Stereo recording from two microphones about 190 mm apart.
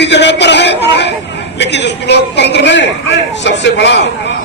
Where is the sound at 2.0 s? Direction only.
65° left (ahead or behind).